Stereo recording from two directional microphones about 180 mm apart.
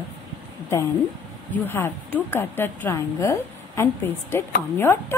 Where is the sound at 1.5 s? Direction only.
10° left (ahead or behind).